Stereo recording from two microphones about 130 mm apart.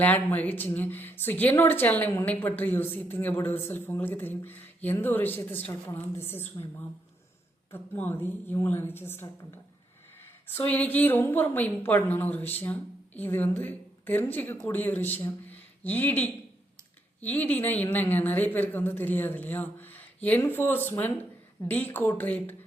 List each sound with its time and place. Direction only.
0.0 s a woman's voice: 10° left (ahead or behind)
7.7 s a woman's voice: 15° left (ahead or behind)
10.7 s a woman's voice: 10° left (ahead or behind)